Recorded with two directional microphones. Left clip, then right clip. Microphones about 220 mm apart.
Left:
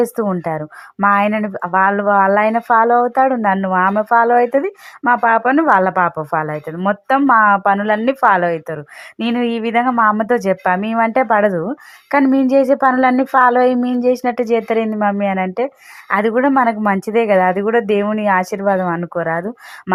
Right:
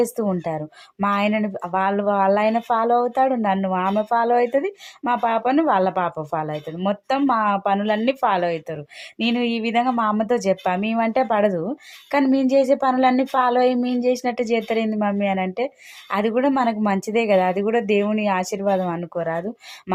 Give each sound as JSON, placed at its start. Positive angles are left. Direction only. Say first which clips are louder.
{"t": 0.0, "sound": "a woman's voice", "louder": "left 5 dB", "side_deg": 15}